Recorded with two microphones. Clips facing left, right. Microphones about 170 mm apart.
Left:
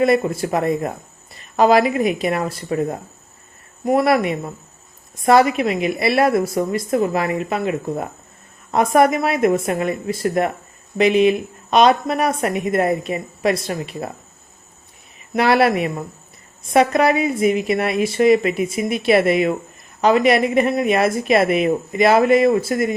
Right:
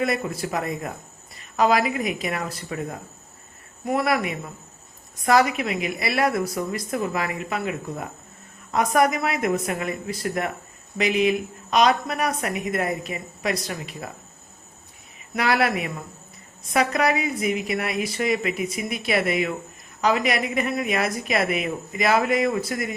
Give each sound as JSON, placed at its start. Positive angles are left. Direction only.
{"t": 0.0, "sound": "a woman's voice", "side_deg": 30}
{"t": 15.4, "sound": "a woman's voice", "side_deg": 30}
{"t": 15.7, "sound": "speech", "side_deg": 45}
{"t": 16.7, "sound": "a woman's voice", "side_deg": 30}
{"t": 20.6, "sound": "a woman's voice", "side_deg": 25}